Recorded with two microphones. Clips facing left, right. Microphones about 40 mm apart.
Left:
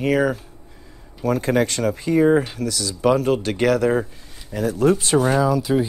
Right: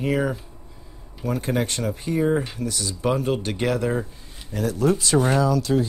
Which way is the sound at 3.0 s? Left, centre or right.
Left.